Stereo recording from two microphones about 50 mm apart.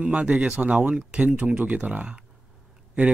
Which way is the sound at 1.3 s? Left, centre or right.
Right.